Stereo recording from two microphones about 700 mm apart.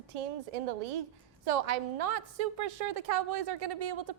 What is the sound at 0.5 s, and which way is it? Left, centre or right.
A woman's voice, right.